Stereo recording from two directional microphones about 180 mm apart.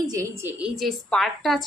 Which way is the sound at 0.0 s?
20° right (ahead or behind).